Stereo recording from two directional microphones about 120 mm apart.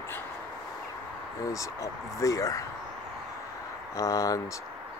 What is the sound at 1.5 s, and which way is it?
Speech, 25° left (ahead or behind).